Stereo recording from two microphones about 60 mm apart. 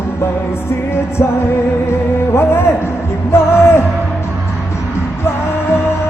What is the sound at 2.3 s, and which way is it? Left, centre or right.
Music, left.